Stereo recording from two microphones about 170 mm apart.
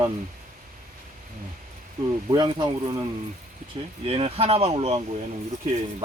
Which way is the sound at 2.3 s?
25° right (ahead or behind).